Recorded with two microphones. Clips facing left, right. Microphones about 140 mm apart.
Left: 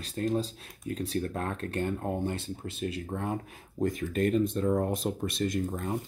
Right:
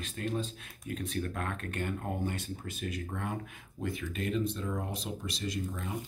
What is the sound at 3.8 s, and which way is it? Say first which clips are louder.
Speech: left 8 dB; 40° left (ahead or behind).